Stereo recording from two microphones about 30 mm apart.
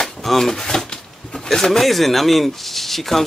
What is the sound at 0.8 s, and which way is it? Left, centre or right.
Speech, left.